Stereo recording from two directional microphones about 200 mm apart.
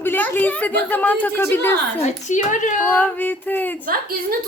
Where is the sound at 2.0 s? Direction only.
40° left (ahead or behind).